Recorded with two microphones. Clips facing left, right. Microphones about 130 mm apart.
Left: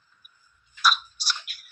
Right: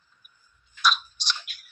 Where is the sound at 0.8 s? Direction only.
5° left (ahead or behind).